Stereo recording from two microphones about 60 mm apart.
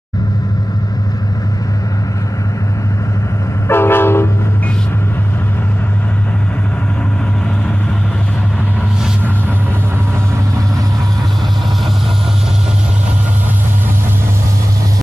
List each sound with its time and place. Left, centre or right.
3.6 s train: left